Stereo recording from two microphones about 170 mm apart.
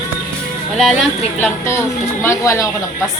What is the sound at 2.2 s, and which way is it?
Speech, 15° left (ahead or behind).